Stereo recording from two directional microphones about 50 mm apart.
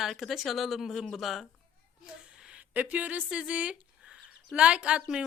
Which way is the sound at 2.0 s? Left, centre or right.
Centre.